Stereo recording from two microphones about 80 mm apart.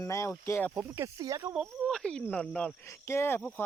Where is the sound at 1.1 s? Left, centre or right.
Right.